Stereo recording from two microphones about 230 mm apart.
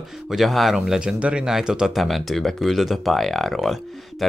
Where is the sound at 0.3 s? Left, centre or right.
Centre.